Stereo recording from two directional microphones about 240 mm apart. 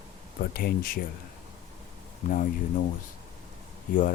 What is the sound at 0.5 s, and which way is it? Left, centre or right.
Speech, left.